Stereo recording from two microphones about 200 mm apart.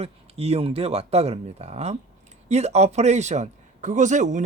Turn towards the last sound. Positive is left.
turn(degrees=-35)  # may be behind; listen again after turning